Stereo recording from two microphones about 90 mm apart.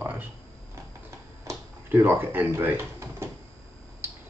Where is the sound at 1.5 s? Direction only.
25° right (ahead or behind).